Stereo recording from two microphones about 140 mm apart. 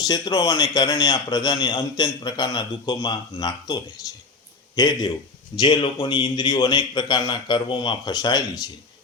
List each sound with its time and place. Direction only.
0.0 s a man's voice: 30° left (ahead or behind)